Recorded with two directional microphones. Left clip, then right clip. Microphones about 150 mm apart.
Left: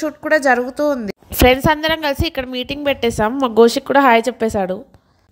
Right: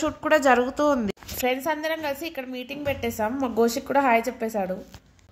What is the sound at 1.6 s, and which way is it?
A woman's voice, 75° left (ahead or behind).